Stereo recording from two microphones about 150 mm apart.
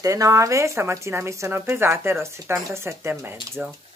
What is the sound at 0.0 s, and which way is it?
Speech, 20° right (ahead or behind).